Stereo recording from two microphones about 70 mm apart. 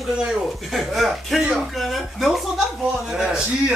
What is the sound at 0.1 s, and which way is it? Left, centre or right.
A man's voice, centre.